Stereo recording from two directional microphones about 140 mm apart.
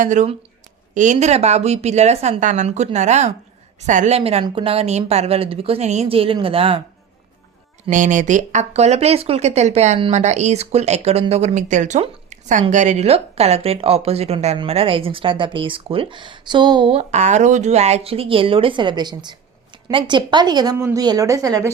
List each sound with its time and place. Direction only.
0.0 s a woman's voice: 60° right (ahead or behind)
4.2 s a woman's voice: 45° right (ahead or behind)
7.9 s a woman's voice: 65° right (ahead or behind)
12.0 s a sound: 60° right (ahead or behind)
12.7 s a woman's voice: 60° right (ahead or behind); by 17.0 s 35° right (ahead or behind)
17.0 s a woman's voice: 55° right (ahead or behind); by 21.7 s 25° right (ahead or behind)